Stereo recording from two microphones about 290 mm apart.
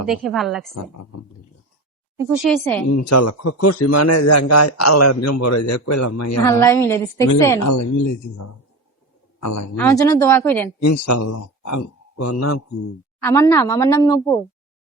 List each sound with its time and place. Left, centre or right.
0.1 s a woman's voice: centre
2.1 s a woman's voice: centre
2.9 s a man's voice: left
6.4 s speech: centre
7.6 s speech: left
9.4 s speech: left
9.7 s speech: centre
10.8 s speech: left
12.1 s a man's voice: left
13.2 s speech: centre